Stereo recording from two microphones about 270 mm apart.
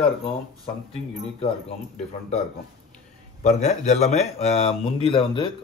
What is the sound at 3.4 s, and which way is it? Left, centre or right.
A man's voice, left.